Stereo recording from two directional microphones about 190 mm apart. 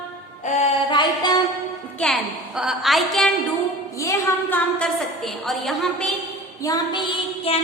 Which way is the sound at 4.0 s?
10° left (ahead or behind).